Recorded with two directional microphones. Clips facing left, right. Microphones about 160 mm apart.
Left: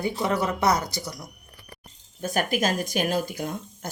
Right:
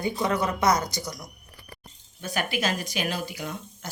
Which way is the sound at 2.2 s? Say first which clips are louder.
Left 4 dB; 45° left (ahead or behind).